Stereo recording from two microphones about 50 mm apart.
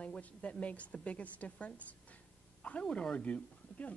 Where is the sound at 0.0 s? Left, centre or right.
Left.